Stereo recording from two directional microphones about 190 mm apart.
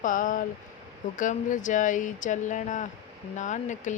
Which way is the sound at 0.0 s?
45° left (ahead or behind).